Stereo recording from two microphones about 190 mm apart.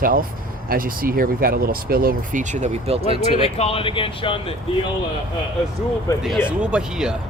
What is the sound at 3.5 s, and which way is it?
Speech, 30° left (ahead or behind).